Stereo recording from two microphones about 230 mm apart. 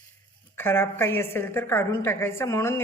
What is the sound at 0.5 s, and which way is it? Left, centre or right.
A woman's voice, centre.